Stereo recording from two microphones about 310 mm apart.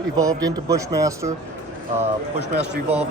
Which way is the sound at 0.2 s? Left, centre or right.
Centre.